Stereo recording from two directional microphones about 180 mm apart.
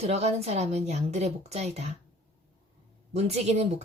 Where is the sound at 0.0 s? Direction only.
35° right (ahead or behind).